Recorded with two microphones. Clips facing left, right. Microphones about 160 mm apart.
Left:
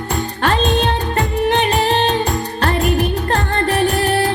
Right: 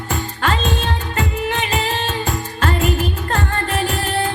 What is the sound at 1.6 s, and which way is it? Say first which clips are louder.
Music: left 6 dB; 60° left (ahead or behind).